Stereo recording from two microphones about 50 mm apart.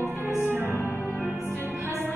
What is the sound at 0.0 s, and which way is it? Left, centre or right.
Music, left.